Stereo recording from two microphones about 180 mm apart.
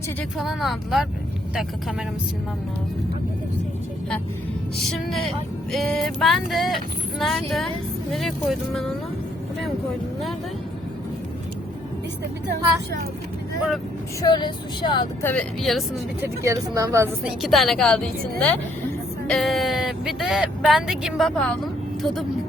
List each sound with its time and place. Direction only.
0.3 s speech: centre (ahead or behind)
4.8 s speech: centre (ahead or behind)
14.2 s speech: 25° left (ahead or behind)
15.2 s speech: 10° left (ahead or behind)
16.2 s speech: 15° right (ahead or behind)
17.4 s speech: centre (ahead or behind)